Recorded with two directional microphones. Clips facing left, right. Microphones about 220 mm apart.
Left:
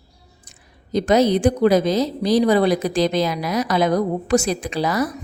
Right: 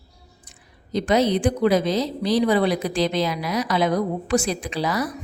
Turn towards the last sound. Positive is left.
turn(degrees=45)  # may be behind; listen again after turning